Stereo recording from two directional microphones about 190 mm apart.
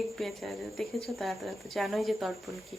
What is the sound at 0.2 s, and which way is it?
Speech, centre (ahead or behind).